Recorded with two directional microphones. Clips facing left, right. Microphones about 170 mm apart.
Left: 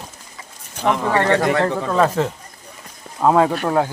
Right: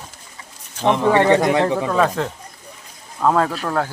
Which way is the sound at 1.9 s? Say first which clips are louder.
Left 1 dB; 5° left (ahead or behind).